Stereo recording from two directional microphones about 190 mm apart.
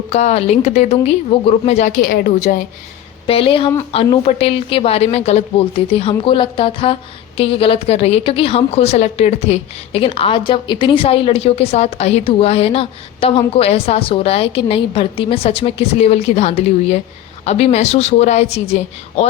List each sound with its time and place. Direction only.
0.1 s a woman's voice: 35° left (ahead or behind)
2.0 s a woman's voice: 50° left (ahead or behind)
3.2 s a woman's voice: 30° left (ahead or behind)